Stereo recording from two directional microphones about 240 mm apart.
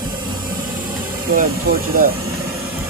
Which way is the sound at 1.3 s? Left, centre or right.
Right.